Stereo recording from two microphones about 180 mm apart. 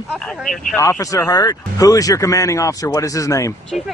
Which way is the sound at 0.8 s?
15° left (ahead or behind).